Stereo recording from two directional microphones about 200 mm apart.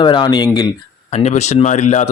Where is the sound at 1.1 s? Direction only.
35° left (ahead or behind).